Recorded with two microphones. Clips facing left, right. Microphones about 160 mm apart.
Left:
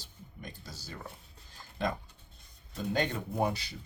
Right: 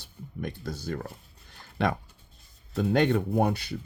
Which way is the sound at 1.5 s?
70° right (ahead or behind).